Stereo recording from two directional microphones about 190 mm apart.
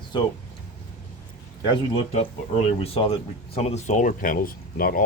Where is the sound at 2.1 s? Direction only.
35° left (ahead or behind).